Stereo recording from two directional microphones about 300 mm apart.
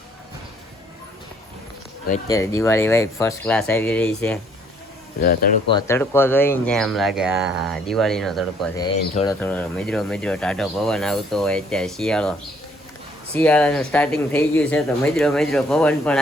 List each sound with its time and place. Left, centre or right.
2.2 s speech: centre
5.2 s speech: left
5.7 s speech: centre
8.7 s speech: centre
13.3 s speech: centre